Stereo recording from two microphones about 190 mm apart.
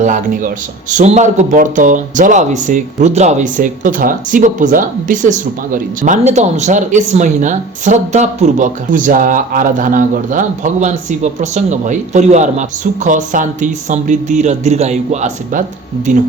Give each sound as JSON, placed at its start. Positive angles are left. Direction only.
{"t": 0.0, "sound": "a man's voice", "side_deg": -40}